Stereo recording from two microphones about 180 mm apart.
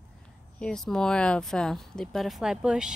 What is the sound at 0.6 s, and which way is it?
Speech, 5° left (ahead or behind).